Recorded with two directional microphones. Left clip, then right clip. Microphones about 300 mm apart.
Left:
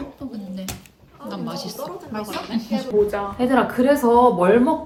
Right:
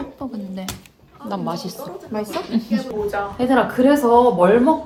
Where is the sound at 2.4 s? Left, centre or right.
Centre.